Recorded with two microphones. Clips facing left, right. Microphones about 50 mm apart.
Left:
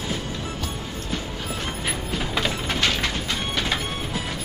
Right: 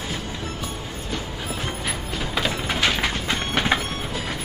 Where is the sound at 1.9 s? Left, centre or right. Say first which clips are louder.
Left 3 dB; centre.